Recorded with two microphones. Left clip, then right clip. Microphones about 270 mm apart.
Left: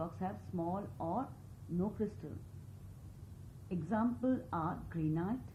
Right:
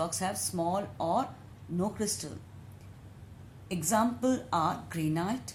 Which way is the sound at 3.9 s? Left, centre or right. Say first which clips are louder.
Right 8 dB; right.